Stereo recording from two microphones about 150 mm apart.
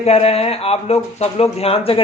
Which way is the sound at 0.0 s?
45° left (ahead or behind).